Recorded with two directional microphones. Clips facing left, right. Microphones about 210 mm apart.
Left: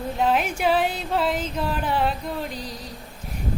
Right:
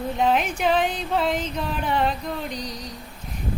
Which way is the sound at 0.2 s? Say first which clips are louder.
Even; 5° left (ahead or behind).